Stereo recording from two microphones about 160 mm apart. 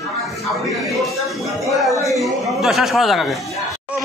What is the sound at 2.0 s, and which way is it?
Speech, centre (ahead or behind).